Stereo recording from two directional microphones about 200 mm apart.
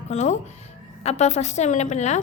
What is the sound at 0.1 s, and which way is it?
A woman's voice, 35° left (ahead or behind).